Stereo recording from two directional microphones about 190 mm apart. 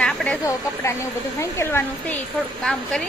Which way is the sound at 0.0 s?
5° left (ahead or behind).